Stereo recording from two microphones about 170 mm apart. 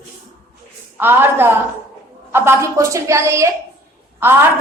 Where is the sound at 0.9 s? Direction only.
10° right (ahead or behind).